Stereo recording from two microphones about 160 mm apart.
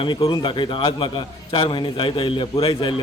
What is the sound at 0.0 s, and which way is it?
A man's voice, 30° left (ahead or behind).